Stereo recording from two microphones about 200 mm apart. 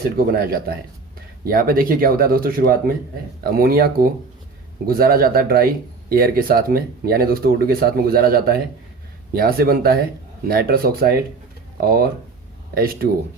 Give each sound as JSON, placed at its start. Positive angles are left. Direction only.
{"t": 0.2, "sound": "speech", "side_deg": -50}